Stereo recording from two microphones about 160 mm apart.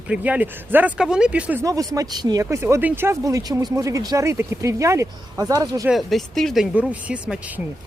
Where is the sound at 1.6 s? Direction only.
20° right (ahead or behind).